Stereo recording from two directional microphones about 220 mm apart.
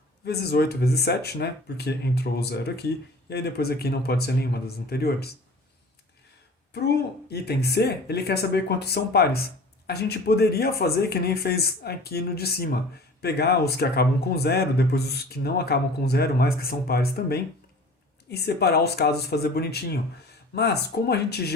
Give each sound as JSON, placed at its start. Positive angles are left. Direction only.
{"t": 0.3, "sound": "speech", "side_deg": 45}
{"t": 6.7, "sound": "speech", "side_deg": 45}